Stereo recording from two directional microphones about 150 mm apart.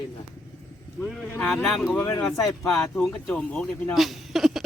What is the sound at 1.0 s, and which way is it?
Speech, 5° left (ahead or behind).